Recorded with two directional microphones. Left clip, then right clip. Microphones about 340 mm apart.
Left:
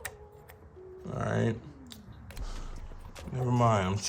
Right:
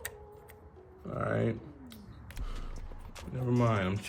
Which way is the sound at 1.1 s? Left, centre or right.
Left.